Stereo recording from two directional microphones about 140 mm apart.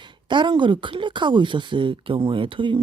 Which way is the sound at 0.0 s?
35° right (ahead or behind).